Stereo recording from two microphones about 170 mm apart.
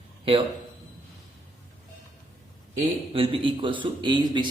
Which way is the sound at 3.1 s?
30° right (ahead or behind).